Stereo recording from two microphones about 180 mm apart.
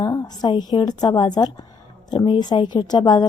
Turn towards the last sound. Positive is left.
turn(degrees=25)  # may be behind; listen again after turning